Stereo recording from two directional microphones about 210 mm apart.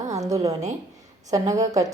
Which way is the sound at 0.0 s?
15° right (ahead or behind).